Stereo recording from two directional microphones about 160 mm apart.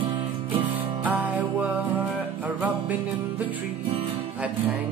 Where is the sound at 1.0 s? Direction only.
10° right (ahead or behind).